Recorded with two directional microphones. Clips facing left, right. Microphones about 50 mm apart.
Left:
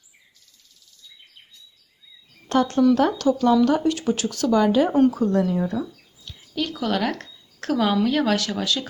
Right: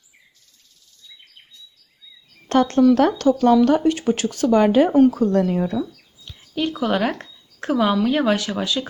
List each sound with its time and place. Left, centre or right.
2.5 s speech: right
4.9 s speech: centre
5.1 s speech: right
6.6 s a woman's voice: right